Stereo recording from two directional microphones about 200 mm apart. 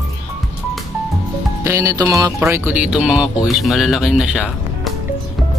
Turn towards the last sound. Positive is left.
turn(degrees=-5)  # may be behind; listen again after turning